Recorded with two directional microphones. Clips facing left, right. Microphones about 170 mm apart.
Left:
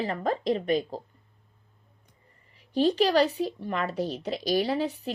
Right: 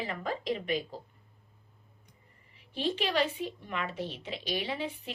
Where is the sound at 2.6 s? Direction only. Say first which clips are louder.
Left 9 dB; 40° left (ahead or behind).